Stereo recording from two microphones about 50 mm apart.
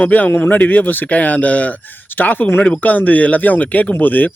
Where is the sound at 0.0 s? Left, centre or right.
Left.